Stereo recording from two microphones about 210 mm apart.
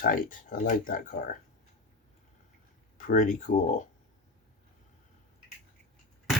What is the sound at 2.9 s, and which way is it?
Speech, 40° left (ahead or behind).